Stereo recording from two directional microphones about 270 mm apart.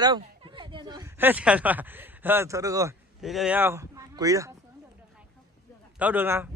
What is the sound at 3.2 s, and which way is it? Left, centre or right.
Speech, centre.